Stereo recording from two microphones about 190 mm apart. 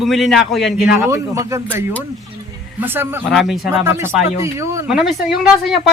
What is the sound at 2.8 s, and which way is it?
Speech, 10° right (ahead or behind).